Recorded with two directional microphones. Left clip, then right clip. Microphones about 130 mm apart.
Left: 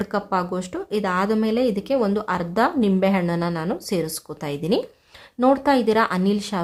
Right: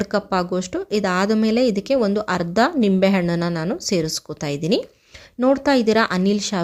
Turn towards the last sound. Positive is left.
turn(degrees=-25)  # may be behind; listen again after turning